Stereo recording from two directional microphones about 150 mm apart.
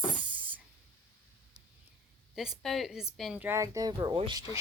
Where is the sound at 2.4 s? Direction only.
Centre (ahead or behind).